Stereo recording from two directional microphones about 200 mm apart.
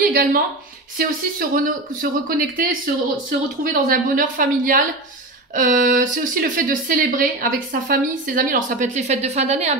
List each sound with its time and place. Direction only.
0.1 s speech: 45° right (ahead or behind)